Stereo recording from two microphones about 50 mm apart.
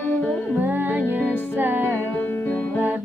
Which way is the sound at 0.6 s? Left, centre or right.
Right.